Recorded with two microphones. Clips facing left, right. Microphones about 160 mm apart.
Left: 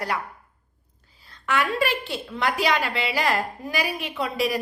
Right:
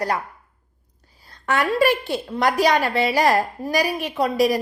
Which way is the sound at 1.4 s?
40° right (ahead or behind).